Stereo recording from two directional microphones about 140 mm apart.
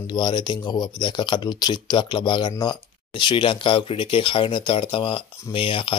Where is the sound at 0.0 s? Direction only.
30° left (ahead or behind).